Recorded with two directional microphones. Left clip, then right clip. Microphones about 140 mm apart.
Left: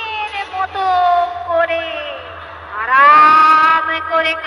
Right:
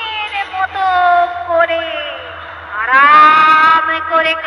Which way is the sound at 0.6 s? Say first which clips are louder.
Right 2 dB; 40° left (ahead or behind).